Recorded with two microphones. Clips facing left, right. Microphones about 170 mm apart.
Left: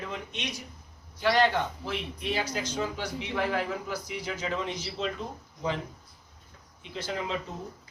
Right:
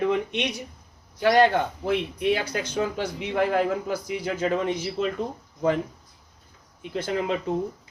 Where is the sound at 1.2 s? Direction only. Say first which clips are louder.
Right 6 dB; 50° right (ahead or behind).